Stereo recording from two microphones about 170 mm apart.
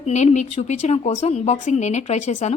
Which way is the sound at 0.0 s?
40° left (ahead or behind).